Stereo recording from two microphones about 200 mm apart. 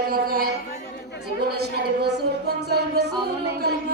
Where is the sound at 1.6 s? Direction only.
55° right (ahead or behind).